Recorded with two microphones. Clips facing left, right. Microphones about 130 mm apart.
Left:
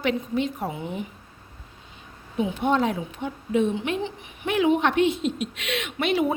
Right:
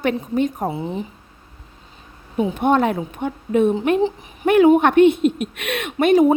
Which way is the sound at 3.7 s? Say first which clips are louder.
Right 9 dB; 40° right (ahead or behind).